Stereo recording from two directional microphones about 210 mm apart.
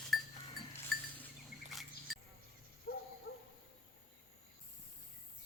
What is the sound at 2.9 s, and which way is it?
Dog, 45° left (ahead or behind).